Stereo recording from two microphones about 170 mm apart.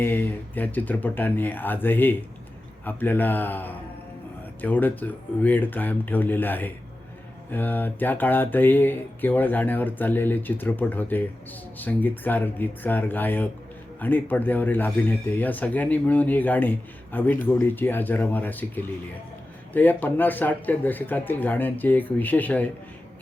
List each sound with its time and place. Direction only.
0.0 s speech: 10° left (ahead or behind)